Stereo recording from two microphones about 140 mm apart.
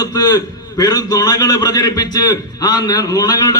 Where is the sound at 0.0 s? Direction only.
25° left (ahead or behind).